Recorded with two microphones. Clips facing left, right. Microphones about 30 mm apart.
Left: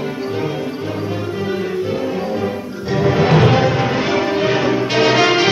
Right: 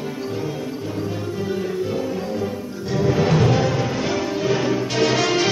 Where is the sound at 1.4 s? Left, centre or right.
Left.